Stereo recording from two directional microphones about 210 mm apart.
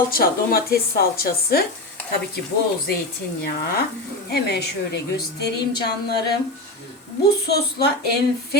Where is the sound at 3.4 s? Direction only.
50° left (ahead or behind).